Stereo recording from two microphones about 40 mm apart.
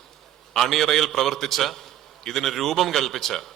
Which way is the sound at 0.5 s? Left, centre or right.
Centre.